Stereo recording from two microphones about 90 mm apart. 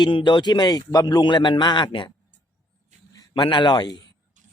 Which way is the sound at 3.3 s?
60° left (ahead or behind).